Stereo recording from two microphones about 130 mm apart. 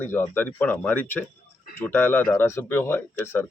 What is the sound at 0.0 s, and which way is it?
Speech, 15° left (ahead or behind).